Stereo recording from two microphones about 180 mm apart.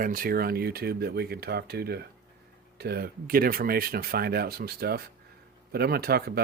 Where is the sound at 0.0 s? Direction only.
50° right (ahead or behind).